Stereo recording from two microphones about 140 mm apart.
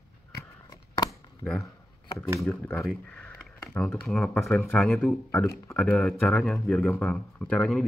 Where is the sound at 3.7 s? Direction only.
5° left (ahead or behind).